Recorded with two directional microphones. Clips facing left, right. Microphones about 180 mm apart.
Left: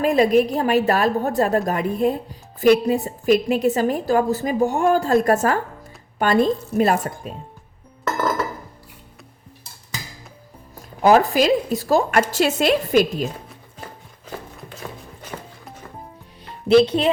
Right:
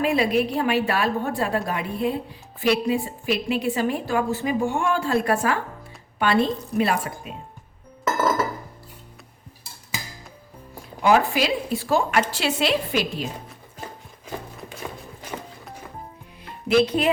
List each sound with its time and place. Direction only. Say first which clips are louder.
0.0 s a woman's voice: left 5 dB; 45° left (ahead or behind)
11.0 s a woman's voice: left 4 dB; 40° left (ahead or behind)
15.2 s music: right 1 dB; 10° right (ahead or behind)
16.6 s speech: left 5 dB; 30° left (ahead or behind)